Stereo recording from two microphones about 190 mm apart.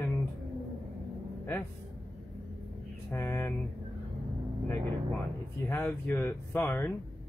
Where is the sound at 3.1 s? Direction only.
15° left (ahead or behind).